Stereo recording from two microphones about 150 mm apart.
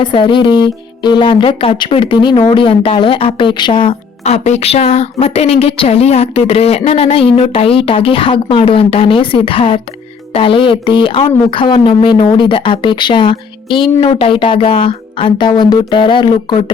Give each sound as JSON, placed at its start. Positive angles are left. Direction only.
{"t": 0.0, "sound": "speech", "side_deg": 30}
{"t": 4.2, "sound": "speech", "side_deg": 50}